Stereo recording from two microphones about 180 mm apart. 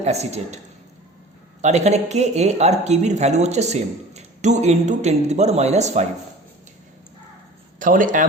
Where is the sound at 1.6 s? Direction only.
40° right (ahead or behind).